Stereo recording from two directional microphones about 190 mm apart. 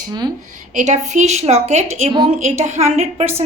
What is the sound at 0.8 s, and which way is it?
A woman's voice, 40° right (ahead or behind).